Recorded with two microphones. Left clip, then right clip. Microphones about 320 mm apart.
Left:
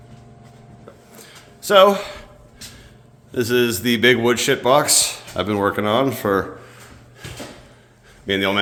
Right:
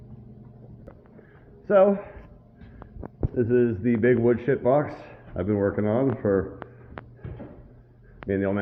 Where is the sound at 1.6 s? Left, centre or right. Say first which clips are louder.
Left 7 dB; centre.